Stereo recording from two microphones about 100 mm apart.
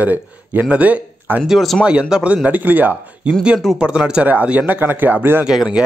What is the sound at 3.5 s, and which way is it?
Speech, centre (ahead or behind).